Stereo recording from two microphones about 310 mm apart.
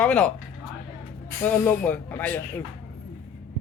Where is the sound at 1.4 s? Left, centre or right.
Centre.